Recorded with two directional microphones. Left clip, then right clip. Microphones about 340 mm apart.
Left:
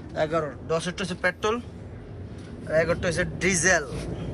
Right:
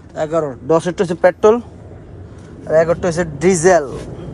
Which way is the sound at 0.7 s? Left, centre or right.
Right.